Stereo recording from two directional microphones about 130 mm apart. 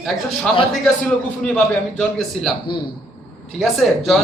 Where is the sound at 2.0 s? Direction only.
5° left (ahead or behind).